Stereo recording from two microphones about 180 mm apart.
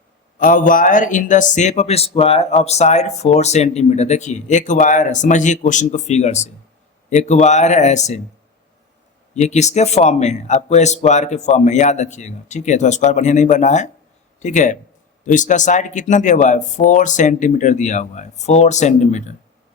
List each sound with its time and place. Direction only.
0.3 s a man's voice: 50° left (ahead or behind)
9.3 s a man's voice: 40° left (ahead or behind)